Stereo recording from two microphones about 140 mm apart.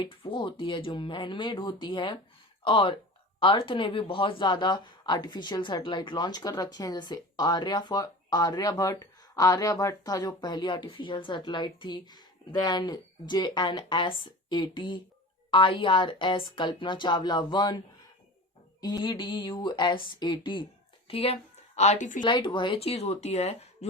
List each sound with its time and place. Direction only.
0.0 s speech: 40° left (ahead or behind)
21.1 s speech: 45° left (ahead or behind)
21.8 s a woman's voice: 55° left (ahead or behind)
22.2 s speech: 35° left (ahead or behind)